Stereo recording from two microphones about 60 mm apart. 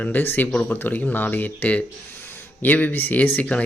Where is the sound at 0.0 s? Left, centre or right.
Left.